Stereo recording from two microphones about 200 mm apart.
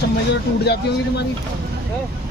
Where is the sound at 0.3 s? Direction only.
55° left (ahead or behind).